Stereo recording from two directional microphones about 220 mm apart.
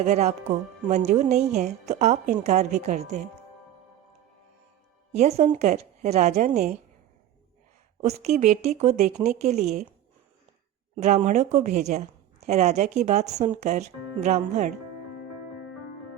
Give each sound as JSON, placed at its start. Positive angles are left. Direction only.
{"t": 0.0, "sound": "a woman's voice", "side_deg": -30}
{"t": 5.1, "sound": "a woman's voice", "side_deg": -30}
{"t": 8.0, "sound": "a woman's voice", "side_deg": -30}
{"t": 10.9, "sound": "a woman's voice", "side_deg": -30}